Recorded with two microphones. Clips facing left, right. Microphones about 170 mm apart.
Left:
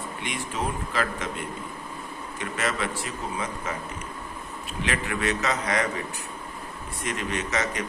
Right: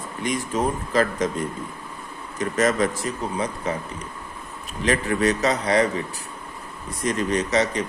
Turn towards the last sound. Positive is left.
turn(degrees=-35)  # may be behind; listen again after turning